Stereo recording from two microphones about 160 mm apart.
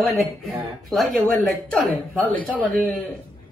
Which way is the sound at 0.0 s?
Centre (ahead or behind).